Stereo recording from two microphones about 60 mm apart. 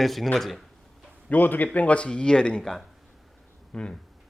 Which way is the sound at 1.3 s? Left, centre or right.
Left.